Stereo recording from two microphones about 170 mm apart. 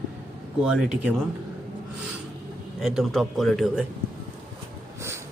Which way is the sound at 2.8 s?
Centre (ahead or behind).